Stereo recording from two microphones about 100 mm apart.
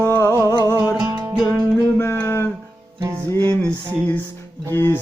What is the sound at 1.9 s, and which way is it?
Music, 20° left (ahead or behind).